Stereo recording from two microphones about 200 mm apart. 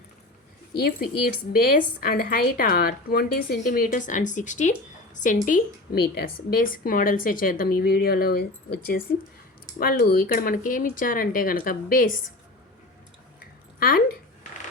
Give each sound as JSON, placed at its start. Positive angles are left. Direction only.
{"t": 0.7, "sound": "a woman's voice", "side_deg": 50}
{"t": 13.7, "sound": "speech", "side_deg": 50}